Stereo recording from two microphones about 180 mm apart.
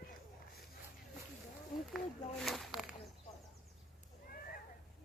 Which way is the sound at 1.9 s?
Centre (ahead or behind).